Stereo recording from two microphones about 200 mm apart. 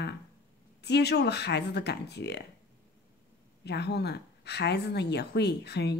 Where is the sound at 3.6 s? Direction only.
55° left (ahead or behind).